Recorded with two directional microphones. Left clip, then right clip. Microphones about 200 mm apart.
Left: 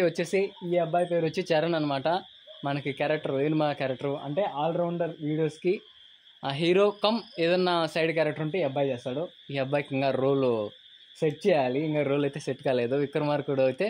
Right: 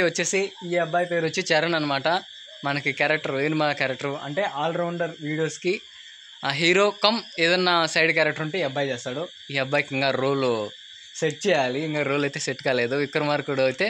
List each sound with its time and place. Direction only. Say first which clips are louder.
0.0 s speech: right 3 dB; 10° right (ahead or behind)